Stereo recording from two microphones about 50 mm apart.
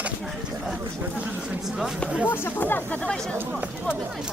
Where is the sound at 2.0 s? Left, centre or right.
Right.